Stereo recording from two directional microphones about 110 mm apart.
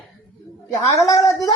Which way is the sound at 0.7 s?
30° left (ahead or behind).